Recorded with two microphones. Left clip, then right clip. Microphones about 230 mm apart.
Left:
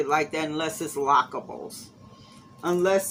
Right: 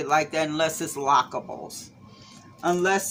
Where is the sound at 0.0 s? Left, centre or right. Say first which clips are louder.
Right 2 dB; right.